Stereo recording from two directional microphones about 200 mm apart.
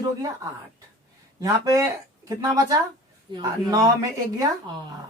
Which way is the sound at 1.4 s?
15° right (ahead or behind).